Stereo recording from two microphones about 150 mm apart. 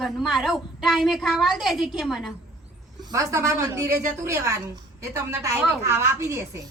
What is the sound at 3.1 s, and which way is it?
A man's voice, 20° right (ahead or behind).